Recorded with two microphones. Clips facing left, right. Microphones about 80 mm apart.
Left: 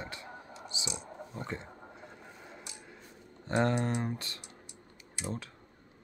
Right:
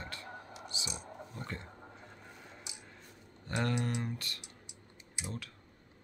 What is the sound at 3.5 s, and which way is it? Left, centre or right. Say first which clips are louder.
Speech: left 5 dB; left.